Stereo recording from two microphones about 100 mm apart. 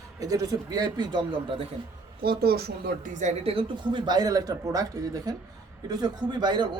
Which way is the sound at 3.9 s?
50° right (ahead or behind).